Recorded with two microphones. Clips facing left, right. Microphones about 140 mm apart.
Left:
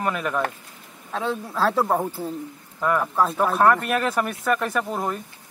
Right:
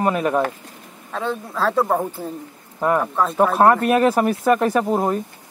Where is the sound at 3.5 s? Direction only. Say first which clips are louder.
Right 4 dB; 30° right (ahead or behind).